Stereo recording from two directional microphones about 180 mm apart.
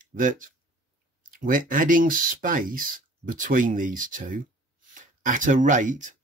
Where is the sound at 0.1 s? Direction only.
50° right (ahead or behind).